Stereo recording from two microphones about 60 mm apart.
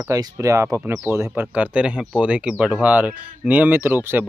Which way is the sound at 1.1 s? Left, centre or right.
Right.